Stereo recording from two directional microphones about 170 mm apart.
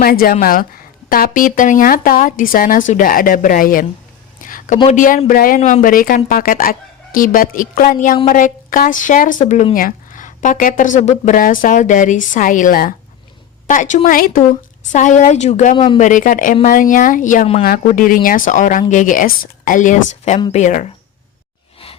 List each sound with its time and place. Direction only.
0.0 s speech: 60° left (ahead or behind)
4.4 s a sound: 50° left (ahead or behind)
4.9 s a woman's voice: 50° left (ahead or behind)
17.6 s a woman's voice: 60° left (ahead or behind)